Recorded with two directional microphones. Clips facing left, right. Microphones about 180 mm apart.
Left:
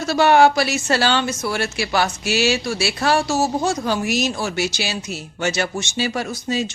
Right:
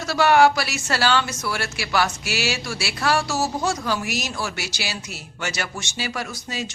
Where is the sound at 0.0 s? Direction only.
25° left (ahead or behind).